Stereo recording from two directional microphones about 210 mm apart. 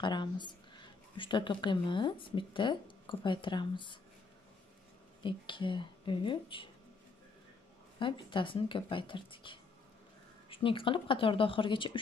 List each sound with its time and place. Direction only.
0.0 s speech: 20° left (ahead or behind)
5.2 s speech: 25° left (ahead or behind)
8.0 s speech: 25° left (ahead or behind)